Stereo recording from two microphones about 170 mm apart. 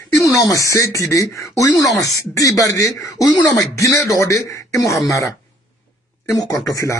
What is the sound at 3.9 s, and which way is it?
Speech, centre (ahead or behind).